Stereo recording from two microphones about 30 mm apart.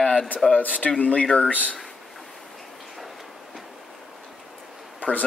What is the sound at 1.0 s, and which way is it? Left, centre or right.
Speech, left.